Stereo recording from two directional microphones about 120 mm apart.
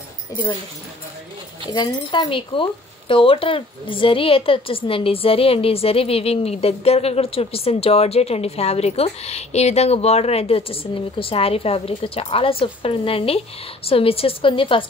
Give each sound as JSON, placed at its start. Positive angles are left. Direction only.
{"t": 1.7, "sound": "speech", "side_deg": 40}